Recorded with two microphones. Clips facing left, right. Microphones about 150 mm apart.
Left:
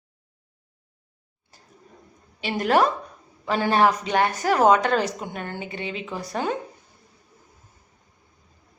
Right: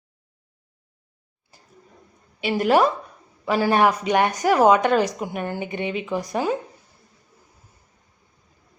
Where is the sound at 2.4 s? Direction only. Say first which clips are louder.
Right 2 dB; 5° right (ahead or behind).